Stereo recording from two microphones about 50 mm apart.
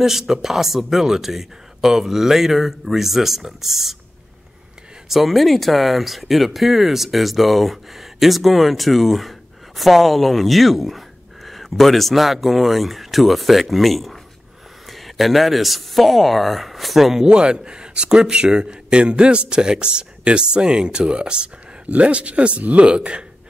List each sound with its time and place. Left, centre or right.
0.0 s speech: centre
5.1 s speech: centre
17.3 s speech: centre